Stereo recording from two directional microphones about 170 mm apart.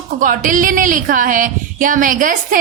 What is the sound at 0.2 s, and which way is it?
Speech, 50° right (ahead or behind).